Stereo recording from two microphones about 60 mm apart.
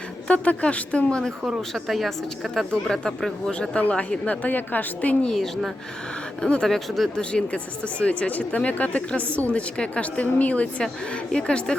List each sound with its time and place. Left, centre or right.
0.3 s speech: left
1.7 s a woman's voice: centre
3.8 s speech: left
5.2 s a woman's voice: centre
7.2 s speech: centre